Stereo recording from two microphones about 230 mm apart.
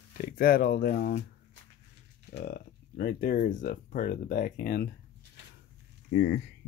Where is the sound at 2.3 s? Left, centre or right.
Left.